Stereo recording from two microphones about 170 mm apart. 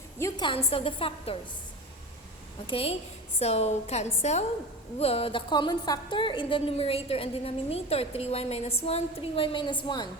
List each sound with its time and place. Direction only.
0.2 s a woman's voice: 15° left (ahead or behind)
0.4 s a woman's voice: 30° left (ahead or behind)
2.6 s a woman's voice: 35° left (ahead or behind)